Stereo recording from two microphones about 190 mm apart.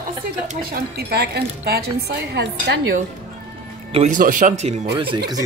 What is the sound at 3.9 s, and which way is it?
Speech, 40° right (ahead or behind).